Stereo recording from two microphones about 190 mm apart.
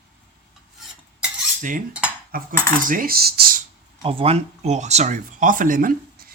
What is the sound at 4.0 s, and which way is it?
Speech, 30° right (ahead or behind).